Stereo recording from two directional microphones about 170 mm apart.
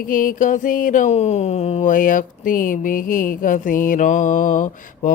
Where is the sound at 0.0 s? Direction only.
55° left (ahead or behind).